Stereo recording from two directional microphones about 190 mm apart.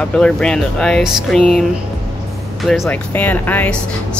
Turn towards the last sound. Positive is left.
turn(degrees=10)  # may be behind; listen again after turning